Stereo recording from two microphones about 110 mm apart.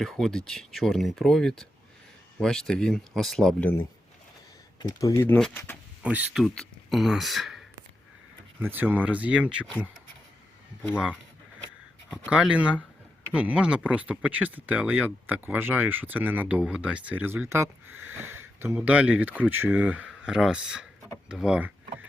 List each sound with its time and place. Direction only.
0.0 s speech: 5° left (ahead or behind)
4.8 s speech: 35° left (ahead or behind)
5.1 s speech: 15° left (ahead or behind)
6.0 s speech: 10° right (ahead or behind)
6.5 s speech: centre (ahead or behind)
8.7 s speech: 15° right (ahead or behind)
10.9 s speech: 10° right (ahead or behind)
12.3 s speech: 10° right (ahead or behind)